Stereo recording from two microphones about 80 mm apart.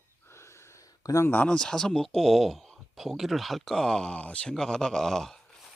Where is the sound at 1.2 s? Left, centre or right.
Centre.